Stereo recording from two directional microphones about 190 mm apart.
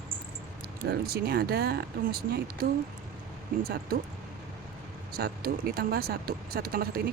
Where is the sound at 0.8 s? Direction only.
55° right (ahead or behind).